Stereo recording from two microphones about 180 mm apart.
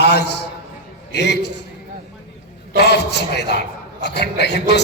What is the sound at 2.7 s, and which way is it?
A man's voice, 65° left (ahead or behind).